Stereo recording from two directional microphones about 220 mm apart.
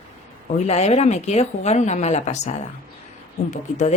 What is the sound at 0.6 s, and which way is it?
A woman's voice, 30° left (ahead or behind).